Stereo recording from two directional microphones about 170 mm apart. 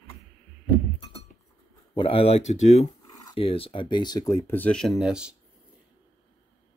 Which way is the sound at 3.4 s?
35° left (ahead or behind).